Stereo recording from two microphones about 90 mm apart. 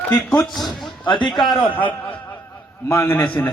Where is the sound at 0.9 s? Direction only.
60° left (ahead or behind).